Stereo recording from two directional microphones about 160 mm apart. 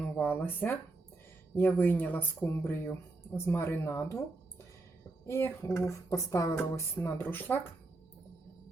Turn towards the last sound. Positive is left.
turn(degrees=10)  # may be behind; listen again after turning